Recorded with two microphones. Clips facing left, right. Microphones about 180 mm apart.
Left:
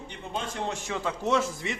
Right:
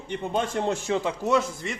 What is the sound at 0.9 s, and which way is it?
Speech, 35° right (ahead or behind).